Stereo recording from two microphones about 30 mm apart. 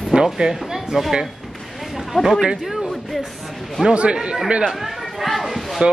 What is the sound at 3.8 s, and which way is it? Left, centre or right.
Speech, right.